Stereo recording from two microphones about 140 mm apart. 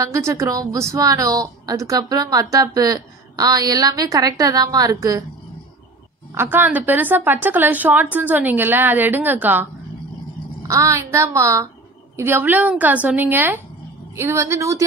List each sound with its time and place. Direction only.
0.0 s a woman's voice: 25° right (ahead or behind)
6.3 s a woman's voice: 15° right (ahead or behind)